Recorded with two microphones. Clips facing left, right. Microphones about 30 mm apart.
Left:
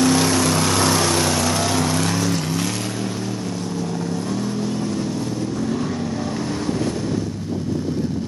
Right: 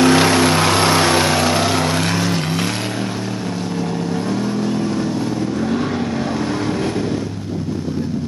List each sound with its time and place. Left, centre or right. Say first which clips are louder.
0.0 s vehicle: right 5 dB; right
4.1 s vehicle: right 4 dB; right